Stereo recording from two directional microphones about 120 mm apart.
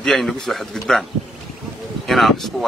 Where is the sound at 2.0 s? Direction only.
Centre (ahead or behind).